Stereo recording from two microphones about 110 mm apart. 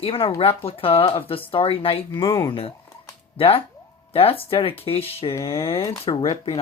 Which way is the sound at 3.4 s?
55° left (ahead or behind).